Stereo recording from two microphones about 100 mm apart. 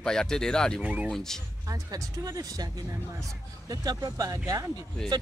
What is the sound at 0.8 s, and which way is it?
Speech, 15° right (ahead or behind).